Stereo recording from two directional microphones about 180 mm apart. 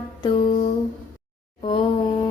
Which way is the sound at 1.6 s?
30° left (ahead or behind).